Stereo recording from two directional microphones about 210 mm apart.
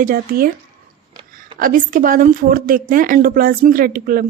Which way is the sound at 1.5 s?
40° right (ahead or behind).